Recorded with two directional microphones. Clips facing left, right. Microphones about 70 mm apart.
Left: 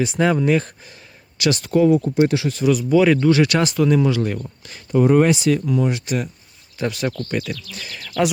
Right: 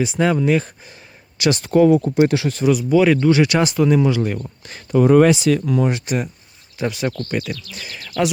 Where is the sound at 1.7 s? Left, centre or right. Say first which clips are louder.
Right 2 dB; right.